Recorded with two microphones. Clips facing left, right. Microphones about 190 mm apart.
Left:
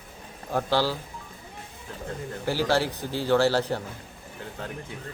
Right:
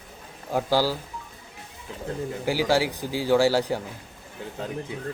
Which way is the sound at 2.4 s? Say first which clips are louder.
Right 1 dB; 10° right (ahead or behind).